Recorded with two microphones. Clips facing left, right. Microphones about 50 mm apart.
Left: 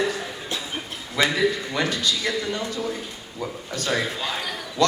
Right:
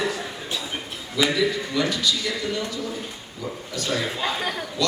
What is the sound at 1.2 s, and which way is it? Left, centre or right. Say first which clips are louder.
A woman's voice: left 1 dB; left.